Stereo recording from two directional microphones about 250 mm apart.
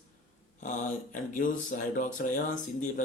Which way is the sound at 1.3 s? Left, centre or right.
Left.